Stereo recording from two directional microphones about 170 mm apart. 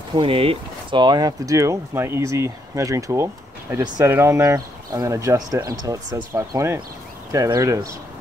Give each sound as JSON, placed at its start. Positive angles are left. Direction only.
{"t": 0.1, "sound": "speech", "side_deg": -30}